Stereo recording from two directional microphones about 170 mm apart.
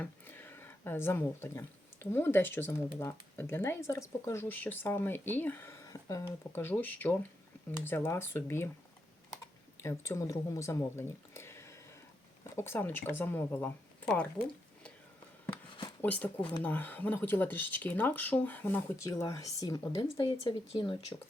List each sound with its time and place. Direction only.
0.0 s speech: 10° left (ahead or behind)
9.8 s speech: 15° left (ahead or behind)
16.0 s speech: 10° left (ahead or behind)
16.4 s speech: 30° left (ahead or behind)
16.6 s speech: 10° left (ahead or behind)
20.2 s speech: 35° left (ahead or behind)